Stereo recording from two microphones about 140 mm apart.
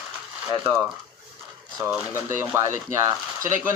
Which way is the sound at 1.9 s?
15° right (ahead or behind).